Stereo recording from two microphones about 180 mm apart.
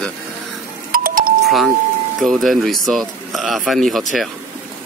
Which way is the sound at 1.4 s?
Centre (ahead or behind).